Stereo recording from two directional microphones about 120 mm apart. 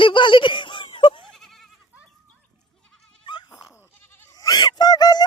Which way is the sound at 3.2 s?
40° left (ahead or behind).